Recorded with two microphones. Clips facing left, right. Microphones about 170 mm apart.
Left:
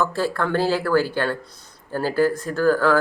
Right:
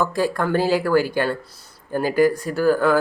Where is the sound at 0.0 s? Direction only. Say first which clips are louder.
Right 2 dB; 15° right (ahead or behind).